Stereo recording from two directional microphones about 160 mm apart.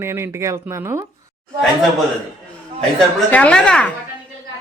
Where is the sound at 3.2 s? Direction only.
10° left (ahead or behind).